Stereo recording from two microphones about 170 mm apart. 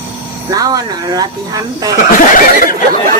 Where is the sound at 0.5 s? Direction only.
20° right (ahead or behind).